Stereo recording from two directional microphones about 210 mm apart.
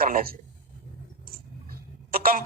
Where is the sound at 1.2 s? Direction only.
45° right (ahead or behind).